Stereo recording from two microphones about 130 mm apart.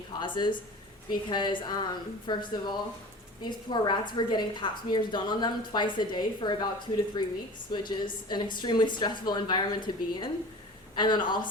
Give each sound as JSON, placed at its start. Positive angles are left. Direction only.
{"t": 0.2, "sound": "a woman's voice", "side_deg": 35}